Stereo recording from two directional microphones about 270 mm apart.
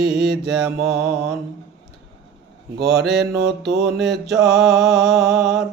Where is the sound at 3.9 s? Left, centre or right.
Centre.